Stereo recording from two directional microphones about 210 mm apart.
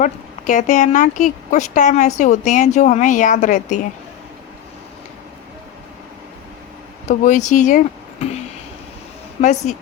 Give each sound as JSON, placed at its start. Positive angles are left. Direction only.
{"t": 0.0, "sound": "speech", "side_deg": 35}
{"t": 7.1, "sound": "speech", "side_deg": 35}
{"t": 9.4, "sound": "speech", "side_deg": 35}